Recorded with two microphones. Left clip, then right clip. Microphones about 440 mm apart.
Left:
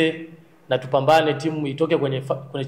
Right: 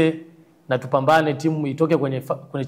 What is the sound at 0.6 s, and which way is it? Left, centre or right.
A man's voice, right.